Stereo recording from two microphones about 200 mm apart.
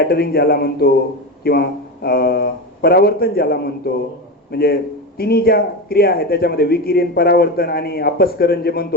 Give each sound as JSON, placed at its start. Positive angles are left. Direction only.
{"t": 0.1, "sound": "speech", "side_deg": 50}